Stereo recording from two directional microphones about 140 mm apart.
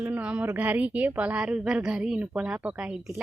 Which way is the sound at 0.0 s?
10° right (ahead or behind).